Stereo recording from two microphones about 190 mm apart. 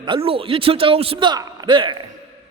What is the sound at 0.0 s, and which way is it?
Speech, 30° right (ahead or behind).